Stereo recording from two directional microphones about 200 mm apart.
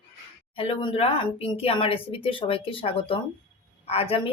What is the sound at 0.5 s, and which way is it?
Speech, 25° left (ahead or behind).